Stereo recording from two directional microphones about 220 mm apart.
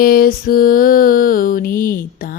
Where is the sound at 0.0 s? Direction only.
40° left (ahead or behind).